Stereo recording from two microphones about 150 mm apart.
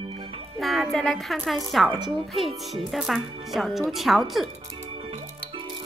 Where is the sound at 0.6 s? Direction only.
Centre (ahead or behind).